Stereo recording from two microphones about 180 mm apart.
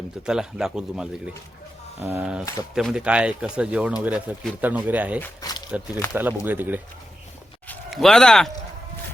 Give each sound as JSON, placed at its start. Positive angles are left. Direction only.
{"t": 0.3, "sound": "speech", "side_deg": -5}
{"t": 2.0, "sound": "speech", "side_deg": -10}
{"t": 5.2, "sound": "speech", "side_deg": 20}
{"t": 6.1, "sound": "speech", "side_deg": -10}
{"t": 7.7, "sound": "speech", "side_deg": 0}